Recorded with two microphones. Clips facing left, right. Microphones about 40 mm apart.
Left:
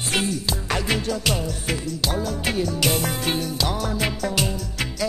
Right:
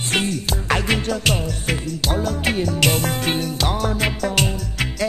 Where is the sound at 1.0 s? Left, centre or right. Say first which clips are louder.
Right 3 dB; right.